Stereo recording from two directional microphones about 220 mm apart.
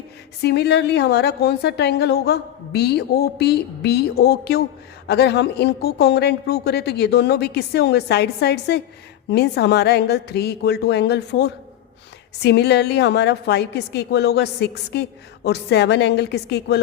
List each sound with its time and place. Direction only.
0.4 s a woman's voice: 50° left (ahead or behind)